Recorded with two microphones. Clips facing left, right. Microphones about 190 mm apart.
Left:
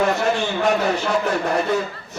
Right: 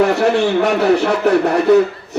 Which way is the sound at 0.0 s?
65° right (ahead or behind).